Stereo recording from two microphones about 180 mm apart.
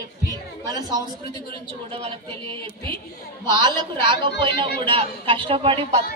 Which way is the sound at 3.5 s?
25° right (ahead or behind).